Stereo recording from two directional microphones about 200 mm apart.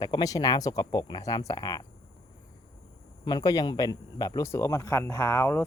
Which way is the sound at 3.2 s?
20° left (ahead or behind).